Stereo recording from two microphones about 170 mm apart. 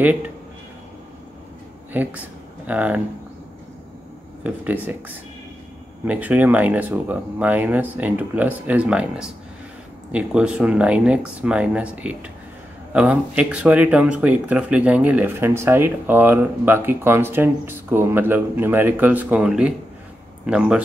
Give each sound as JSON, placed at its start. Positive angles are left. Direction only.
{"t": 1.9, "sound": "speech", "side_deg": -10}
{"t": 4.4, "sound": "speech", "side_deg": -10}